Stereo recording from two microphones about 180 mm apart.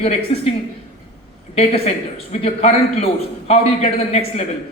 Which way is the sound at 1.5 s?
35° left (ahead or behind).